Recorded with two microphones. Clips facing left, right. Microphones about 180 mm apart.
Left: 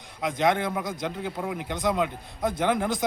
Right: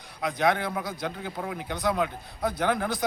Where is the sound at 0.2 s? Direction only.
20° left (ahead or behind).